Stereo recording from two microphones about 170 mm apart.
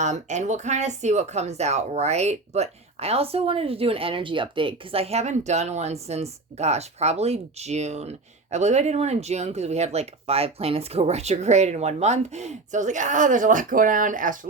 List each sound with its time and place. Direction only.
0.0 s speech: 45° right (ahead or behind)